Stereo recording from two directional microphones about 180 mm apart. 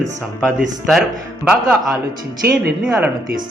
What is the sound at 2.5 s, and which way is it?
Speech, 5° right (ahead or behind).